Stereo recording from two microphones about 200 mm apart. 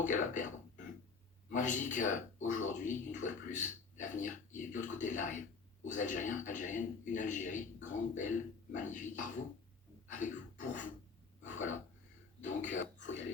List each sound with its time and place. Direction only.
0.0 s a man's voice: 40° left (ahead or behind)
10.1 s a sound: 40° left (ahead or behind)
11.4 s a man's voice: 40° left (ahead or behind)